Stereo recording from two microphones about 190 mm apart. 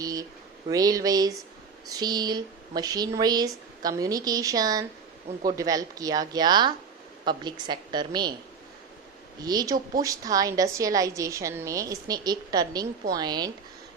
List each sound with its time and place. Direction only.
0.0 s a sound: 20° right (ahead or behind)
0.7 s speech: 20° right (ahead or behind)
9.4 s a woman's voice: 20° right (ahead or behind)